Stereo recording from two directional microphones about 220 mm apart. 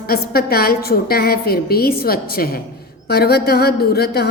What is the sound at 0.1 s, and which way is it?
A woman's voice, 45° left (ahead or behind).